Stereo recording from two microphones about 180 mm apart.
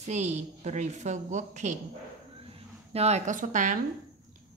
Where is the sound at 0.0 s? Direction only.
40° right (ahead or behind).